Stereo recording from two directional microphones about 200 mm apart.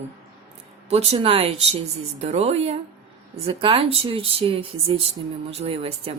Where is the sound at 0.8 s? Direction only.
30° right (ahead or behind).